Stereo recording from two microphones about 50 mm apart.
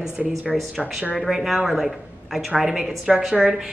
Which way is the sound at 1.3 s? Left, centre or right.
Centre.